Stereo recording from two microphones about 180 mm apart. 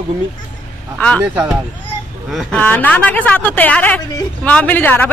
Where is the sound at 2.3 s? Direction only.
Centre (ahead or behind).